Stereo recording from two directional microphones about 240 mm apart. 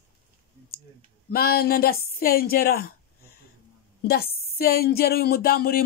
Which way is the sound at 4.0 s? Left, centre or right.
Left.